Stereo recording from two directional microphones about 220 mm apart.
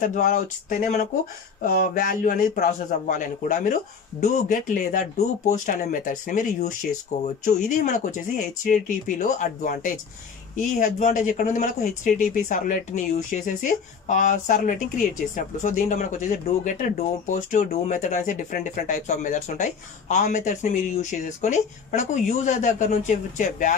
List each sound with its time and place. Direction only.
0.0 s speech: 35° left (ahead or behind)